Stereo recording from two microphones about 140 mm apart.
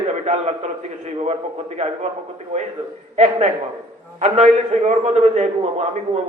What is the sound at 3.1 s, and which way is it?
A man's voice, 50° right (ahead or behind).